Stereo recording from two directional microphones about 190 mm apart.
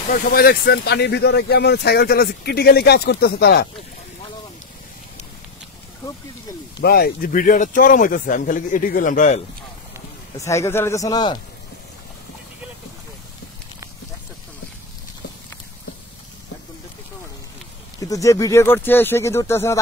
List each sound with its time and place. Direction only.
0.1 s speech: 55° left (ahead or behind)
6.8 s speech: 55° left (ahead or behind)
10.3 s speech: 15° left (ahead or behind)
18.0 s speech: 15° left (ahead or behind)